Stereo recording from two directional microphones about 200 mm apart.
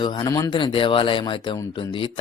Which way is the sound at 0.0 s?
20° left (ahead or behind).